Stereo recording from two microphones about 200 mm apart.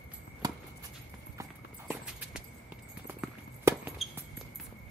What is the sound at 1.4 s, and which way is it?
Clip-clop, 15° right (ahead or behind).